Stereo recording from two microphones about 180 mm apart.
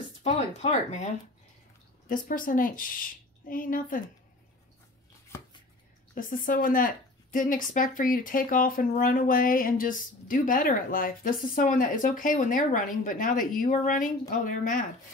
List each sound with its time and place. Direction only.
0.2 s speech: 35° left (ahead or behind)
6.1 s speech: 50° left (ahead or behind)